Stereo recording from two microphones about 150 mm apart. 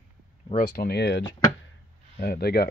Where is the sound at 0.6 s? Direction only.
75° left (ahead or behind).